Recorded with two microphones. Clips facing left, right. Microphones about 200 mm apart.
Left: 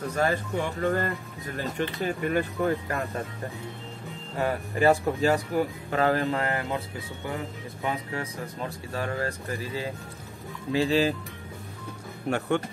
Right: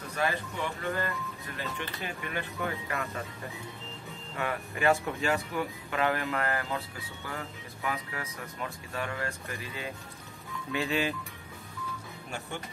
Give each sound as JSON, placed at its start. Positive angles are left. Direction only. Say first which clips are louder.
{"t": 0.1, "sound": "speech", "louder": "left 4 dB", "side_deg": 45}
{"t": 4.4, "sound": "speech", "louder": "left 7 dB", "side_deg": 35}
{"t": 12.3, "sound": "speech", "louder": "left 14 dB", "side_deg": 65}